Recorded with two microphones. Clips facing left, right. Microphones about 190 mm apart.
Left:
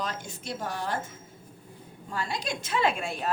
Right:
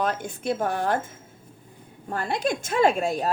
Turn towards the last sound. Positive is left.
turn(degrees=-40)  # may be behind; listen again after turning